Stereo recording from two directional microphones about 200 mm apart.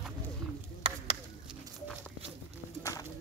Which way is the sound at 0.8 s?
30° right (ahead or behind).